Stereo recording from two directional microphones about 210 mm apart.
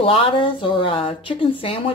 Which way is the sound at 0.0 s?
25° left (ahead or behind).